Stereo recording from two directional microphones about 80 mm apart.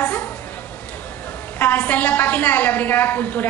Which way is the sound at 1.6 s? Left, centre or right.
Left.